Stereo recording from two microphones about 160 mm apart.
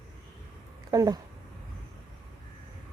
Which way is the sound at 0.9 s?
25° right (ahead or behind).